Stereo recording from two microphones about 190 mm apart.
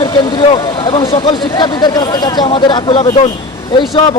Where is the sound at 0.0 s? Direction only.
25° left (ahead or behind).